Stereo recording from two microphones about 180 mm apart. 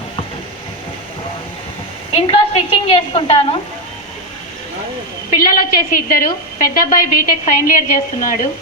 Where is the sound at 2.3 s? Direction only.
35° left (ahead or behind).